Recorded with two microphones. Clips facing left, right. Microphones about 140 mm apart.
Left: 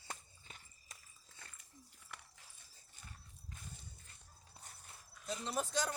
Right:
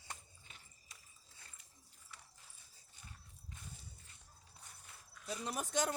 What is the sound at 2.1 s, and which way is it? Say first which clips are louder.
Horse: left 4 dB; 60° left (ahead or behind).